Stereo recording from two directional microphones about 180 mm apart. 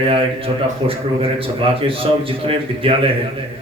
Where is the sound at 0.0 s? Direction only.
30° right (ahead or behind).